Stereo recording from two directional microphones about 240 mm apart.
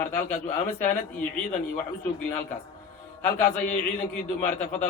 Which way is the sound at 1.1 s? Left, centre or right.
Centre.